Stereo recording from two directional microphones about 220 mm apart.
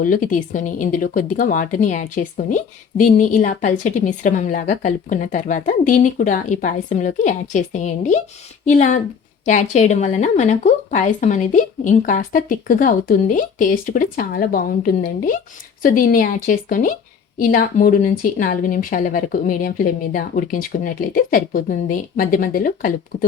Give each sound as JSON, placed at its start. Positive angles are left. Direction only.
{"t": 0.0, "sound": "a woman's voice", "side_deg": 40}